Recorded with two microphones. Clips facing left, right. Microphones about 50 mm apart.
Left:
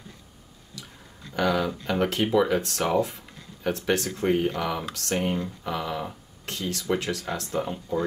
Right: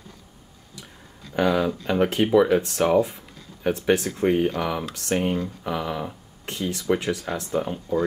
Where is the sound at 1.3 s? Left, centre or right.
Centre.